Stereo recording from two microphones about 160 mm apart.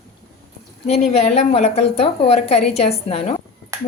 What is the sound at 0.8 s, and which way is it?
A woman's voice, 40° left (ahead or behind).